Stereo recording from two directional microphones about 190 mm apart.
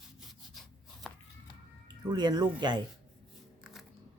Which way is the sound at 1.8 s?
20° right (ahead or behind).